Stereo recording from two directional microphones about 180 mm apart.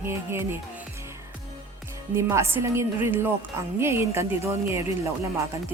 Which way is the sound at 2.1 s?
15° right (ahead or behind).